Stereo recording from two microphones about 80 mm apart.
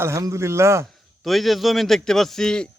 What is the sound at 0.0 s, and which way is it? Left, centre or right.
Speech, right.